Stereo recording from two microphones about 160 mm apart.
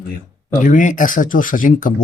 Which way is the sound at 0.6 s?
55° left (ahead or behind).